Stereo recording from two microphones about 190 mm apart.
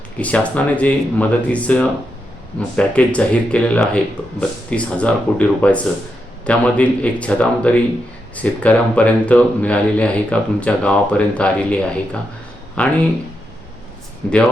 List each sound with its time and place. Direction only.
0.2 s speech: 5° left (ahead or behind)
14.2 s speech: 5° left (ahead or behind)